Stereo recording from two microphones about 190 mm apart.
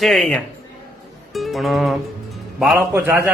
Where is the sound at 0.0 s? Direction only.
Centre (ahead or behind).